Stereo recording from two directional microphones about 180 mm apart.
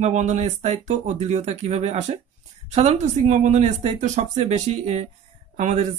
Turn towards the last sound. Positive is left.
turn(degrees=-45)  # may be behind; listen again after turning